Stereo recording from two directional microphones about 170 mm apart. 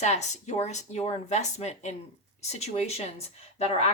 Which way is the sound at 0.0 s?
40° left (ahead or behind).